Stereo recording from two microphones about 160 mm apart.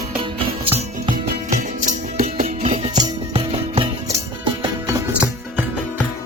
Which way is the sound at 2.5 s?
40° right (ahead or behind).